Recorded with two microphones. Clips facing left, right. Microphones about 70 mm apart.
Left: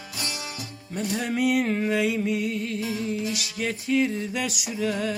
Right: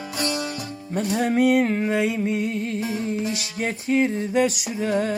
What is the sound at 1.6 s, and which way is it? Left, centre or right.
Music, right.